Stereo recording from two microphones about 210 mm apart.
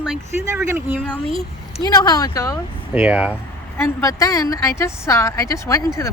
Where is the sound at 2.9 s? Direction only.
5° right (ahead or behind).